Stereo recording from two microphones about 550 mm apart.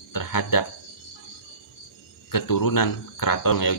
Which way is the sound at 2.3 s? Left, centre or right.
Left.